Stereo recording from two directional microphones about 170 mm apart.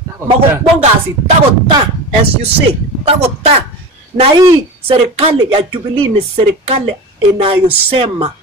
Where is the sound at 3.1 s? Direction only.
40° right (ahead or behind).